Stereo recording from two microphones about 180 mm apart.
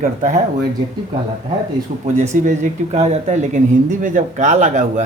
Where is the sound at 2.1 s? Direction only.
40° right (ahead or behind).